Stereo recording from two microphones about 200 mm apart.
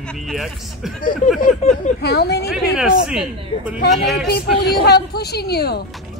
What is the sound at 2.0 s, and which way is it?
Speech, 55° left (ahead or behind).